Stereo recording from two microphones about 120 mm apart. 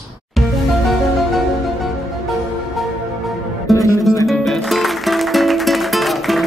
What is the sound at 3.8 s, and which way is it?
Music, 25° left (ahead or behind).